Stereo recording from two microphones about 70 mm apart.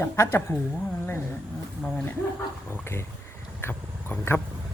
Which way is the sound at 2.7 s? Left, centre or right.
Left.